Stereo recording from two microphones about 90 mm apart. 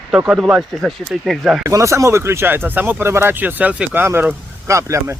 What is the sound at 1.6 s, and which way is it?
Speech, 35° right (ahead or behind).